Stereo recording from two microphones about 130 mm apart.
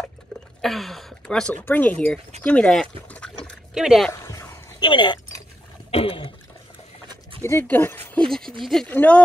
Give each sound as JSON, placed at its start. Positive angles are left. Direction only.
{"t": 0.6, "sound": "speech", "side_deg": 0}
{"t": 3.1, "sound": "a sound", "side_deg": 10}
{"t": 3.7, "sound": "speech", "side_deg": -5}
{"t": 4.1, "sound": "dog", "side_deg": 20}
{"t": 4.7, "sound": "speech", "side_deg": 35}
{"t": 5.9, "sound": "throat clearing", "side_deg": 45}
{"t": 7.4, "sound": "speech", "side_deg": 15}